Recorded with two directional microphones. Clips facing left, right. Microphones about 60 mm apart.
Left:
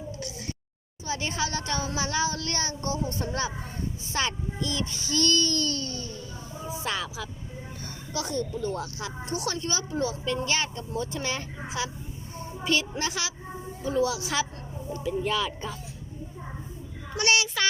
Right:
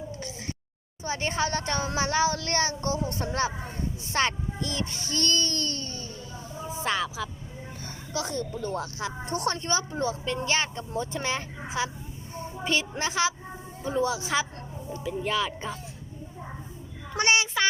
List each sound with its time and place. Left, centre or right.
1.0 s a child's voice: right
8.1 s speech: right
9.3 s a child's voice: right
14.9 s speech: centre
15.3 s a woman's voice: right
17.2 s a woman's voice: right